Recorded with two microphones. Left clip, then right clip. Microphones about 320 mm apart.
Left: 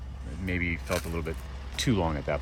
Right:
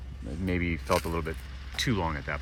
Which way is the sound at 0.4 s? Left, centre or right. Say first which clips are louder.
Right 1 dB; right.